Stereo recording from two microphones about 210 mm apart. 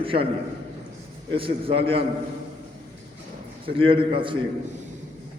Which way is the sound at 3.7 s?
25° right (ahead or behind).